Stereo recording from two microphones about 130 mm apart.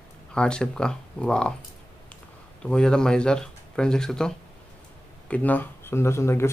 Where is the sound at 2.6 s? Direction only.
5° left (ahead or behind).